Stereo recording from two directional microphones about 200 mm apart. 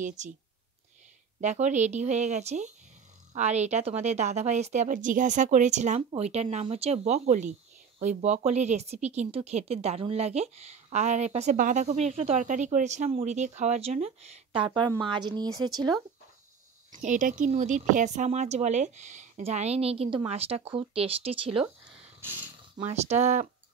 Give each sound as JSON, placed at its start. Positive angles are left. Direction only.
{"t": 0.2, "sound": "speech", "side_deg": -35}
{"t": 1.4, "sound": "speech", "side_deg": -35}
{"t": 17.0, "sound": "speech", "side_deg": -40}
{"t": 22.8, "sound": "speech", "side_deg": -35}